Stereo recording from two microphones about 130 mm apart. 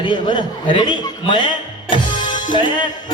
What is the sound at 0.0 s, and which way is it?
Speech, 35° left (ahead or behind).